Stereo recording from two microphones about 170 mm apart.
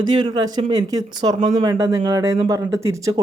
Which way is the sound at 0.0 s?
25° right (ahead or behind).